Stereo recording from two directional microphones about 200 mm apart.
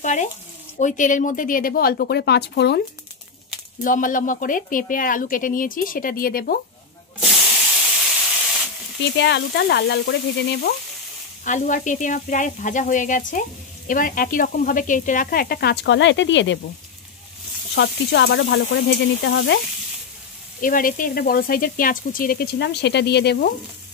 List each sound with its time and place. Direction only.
0.0 s speech: 35° left (ahead or behind); by 2.8 s 60° left (ahead or behind)
3.8 s speech: 40° left (ahead or behind)
9.0 s speech: 65° left (ahead or behind)
11.4 s speech: 40° left (ahead or behind); by 16.5 s 65° left (ahead or behind)
17.7 s speech: 60° left (ahead or behind)
20.6 s speech: 45° left (ahead or behind)